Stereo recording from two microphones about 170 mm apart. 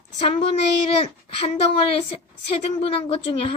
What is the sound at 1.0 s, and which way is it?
A woman's voice, 35° left (ahead or behind).